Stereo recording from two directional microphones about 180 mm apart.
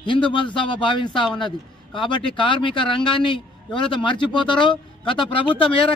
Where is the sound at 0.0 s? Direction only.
25° left (ahead or behind).